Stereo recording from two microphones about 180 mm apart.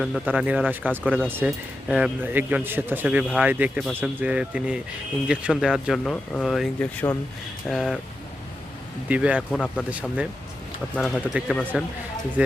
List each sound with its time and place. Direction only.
0.0 s a man's voice: 5° right (ahead or behind)
6.7 s speech: 10° left (ahead or behind)
7.7 s speech: centre (ahead or behind)
9.0 s a man's voice: 10° right (ahead or behind)
9.5 s speech: 5° left (ahead or behind)
10.9 s speech: centre (ahead or behind)